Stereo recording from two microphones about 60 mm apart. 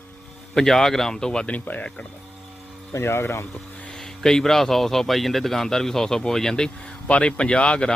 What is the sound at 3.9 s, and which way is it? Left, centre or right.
A man's voice, centre.